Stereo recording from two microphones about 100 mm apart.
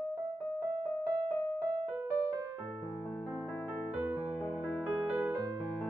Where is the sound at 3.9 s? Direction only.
20° right (ahead or behind).